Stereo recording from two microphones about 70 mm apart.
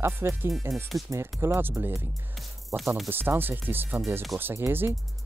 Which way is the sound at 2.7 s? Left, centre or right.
Centre.